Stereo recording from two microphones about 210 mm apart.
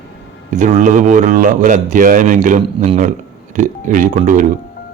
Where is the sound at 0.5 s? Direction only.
35° right (ahead or behind).